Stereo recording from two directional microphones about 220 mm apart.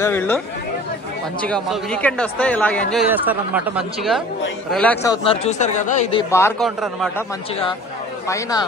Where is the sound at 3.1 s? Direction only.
5° right (ahead or behind).